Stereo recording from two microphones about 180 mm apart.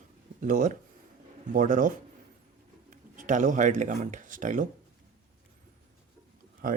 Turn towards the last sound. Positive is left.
turn(degrees=-50)  # may be behind; listen again after turning